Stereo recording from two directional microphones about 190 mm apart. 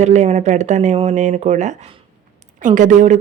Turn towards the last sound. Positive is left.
turn(degrees=-40)  # may be behind; listen again after turning